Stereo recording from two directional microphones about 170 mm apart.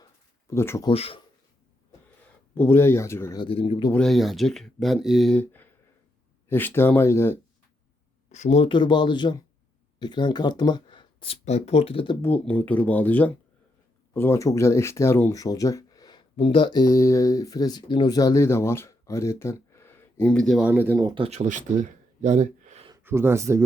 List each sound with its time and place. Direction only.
0.0 s a sound: 15° left (ahead or behind)
0.9 s speech: 35° left (ahead or behind)
2.6 s speech: 15° left (ahead or behind)
3.4 s speech: 35° left (ahead or behind)
3.9 s speech: centre (ahead or behind)
8.3 s speech: 40° left (ahead or behind)
12.2 s speech: 10° left (ahead or behind)
20.7 s speech: 10° right (ahead or behind)
21.1 s speech: 35° right (ahead or behind)
23.0 s speech: 15° right (ahead or behind)